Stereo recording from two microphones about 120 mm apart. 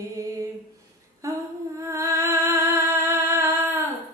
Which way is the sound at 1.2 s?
25° right (ahead or behind).